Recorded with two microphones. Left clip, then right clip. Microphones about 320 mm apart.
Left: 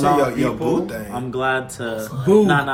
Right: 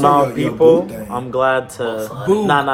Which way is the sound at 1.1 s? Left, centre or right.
Centre.